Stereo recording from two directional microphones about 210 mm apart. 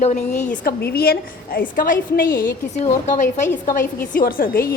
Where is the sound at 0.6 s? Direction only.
50° left (ahead or behind).